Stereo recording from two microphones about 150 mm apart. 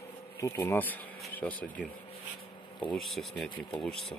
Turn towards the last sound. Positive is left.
turn(degrees=5)  # may be behind; listen again after turning